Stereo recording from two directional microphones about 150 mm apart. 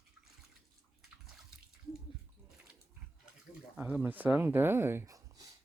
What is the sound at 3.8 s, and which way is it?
Speech, 10° right (ahead or behind).